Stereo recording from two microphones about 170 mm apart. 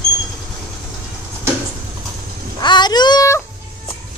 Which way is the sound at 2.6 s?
25° left (ahead or behind).